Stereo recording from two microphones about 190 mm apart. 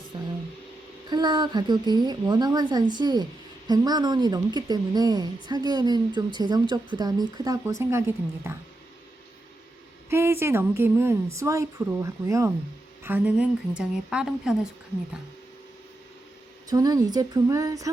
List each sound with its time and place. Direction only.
1.1 s a woman's voice: 25° right (ahead or behind)
10.1 s a woman's voice: 15° right (ahead or behind)
16.6 s a woman's voice: 20° right (ahead or behind)